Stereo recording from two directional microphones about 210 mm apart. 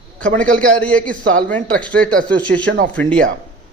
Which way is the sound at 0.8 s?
5° left (ahead or behind).